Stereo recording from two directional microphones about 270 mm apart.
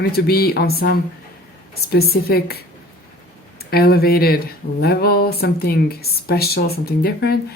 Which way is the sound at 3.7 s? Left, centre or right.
Left.